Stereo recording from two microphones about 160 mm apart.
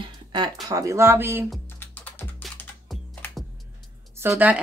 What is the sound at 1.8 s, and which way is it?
Music, 10° left (ahead or behind).